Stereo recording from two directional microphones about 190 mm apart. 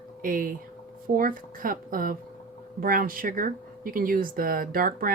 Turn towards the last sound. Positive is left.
turn(degrees=-50)  # may be behind; listen again after turning